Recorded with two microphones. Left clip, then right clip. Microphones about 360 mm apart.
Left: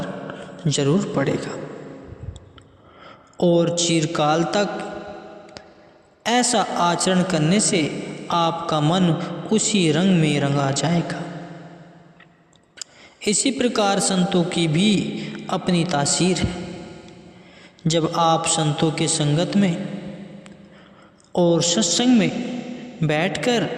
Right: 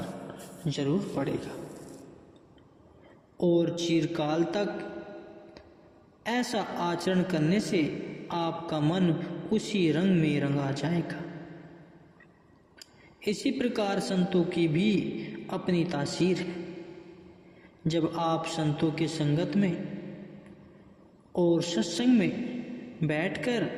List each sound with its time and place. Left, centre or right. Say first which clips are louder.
0.6 s a man's voice: left 9 dB; left
3.3 s a man's voice: left 8 dB; left
6.2 s a man's voice: left 11 dB; left
12.8 s a man's voice: left 8 dB; left
17.8 s a man's voice: left 10 dB; left
21.3 s a man's voice: left 8 dB; left